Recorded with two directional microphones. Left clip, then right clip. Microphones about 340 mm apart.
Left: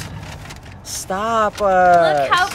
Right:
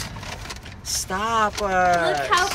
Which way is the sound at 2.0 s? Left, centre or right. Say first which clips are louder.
Left 5 dB; centre.